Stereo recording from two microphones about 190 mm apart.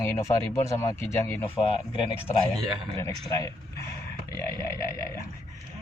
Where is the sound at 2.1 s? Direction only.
5° right (ahead or behind).